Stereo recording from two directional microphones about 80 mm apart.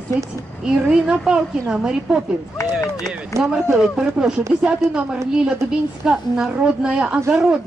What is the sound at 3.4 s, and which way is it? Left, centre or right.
A woman's voice, centre.